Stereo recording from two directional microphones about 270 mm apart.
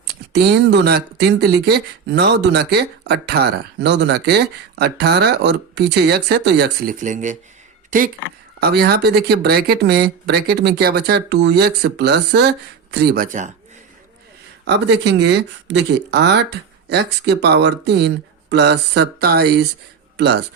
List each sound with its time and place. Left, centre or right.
0.3 s speech: right
14.6 s speech: right